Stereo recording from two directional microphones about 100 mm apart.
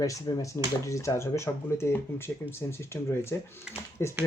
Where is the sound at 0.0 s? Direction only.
35° left (ahead or behind).